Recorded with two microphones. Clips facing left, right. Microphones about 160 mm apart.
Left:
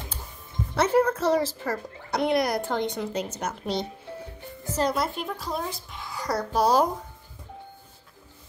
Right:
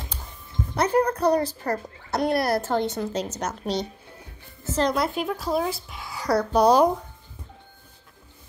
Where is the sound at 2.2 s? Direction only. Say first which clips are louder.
Right 1 dB; 20° left (ahead or behind).